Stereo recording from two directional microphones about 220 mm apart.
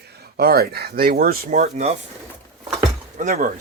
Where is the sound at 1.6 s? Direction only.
30° right (ahead or behind).